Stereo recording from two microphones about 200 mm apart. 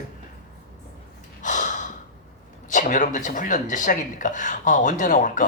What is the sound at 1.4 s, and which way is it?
Gasp, 40° left (ahead or behind).